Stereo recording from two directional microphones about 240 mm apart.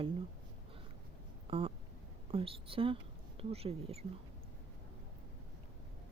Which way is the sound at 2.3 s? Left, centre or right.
Right.